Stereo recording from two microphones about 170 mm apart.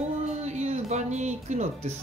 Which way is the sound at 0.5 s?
40° right (ahead or behind).